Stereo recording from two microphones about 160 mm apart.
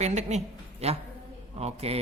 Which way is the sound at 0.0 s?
45° right (ahead or behind).